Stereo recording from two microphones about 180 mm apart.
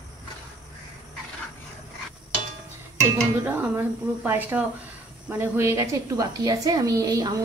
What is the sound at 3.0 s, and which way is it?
A woman's voice, 10° right (ahead or behind).